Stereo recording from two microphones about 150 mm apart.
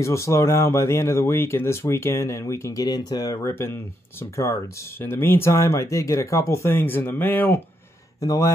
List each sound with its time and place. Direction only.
0.0 s speech: 20° left (ahead or behind)